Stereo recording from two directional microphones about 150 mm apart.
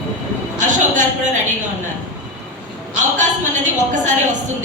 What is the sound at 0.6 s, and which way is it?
Speech, 55° right (ahead or behind).